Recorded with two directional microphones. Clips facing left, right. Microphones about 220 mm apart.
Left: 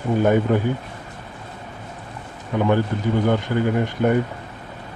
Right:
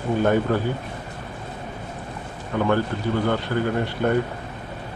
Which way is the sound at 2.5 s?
15° left (ahead or behind).